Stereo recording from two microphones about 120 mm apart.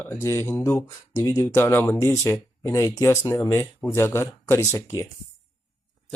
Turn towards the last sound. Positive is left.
turn(degrees=30)  # may be behind; listen again after turning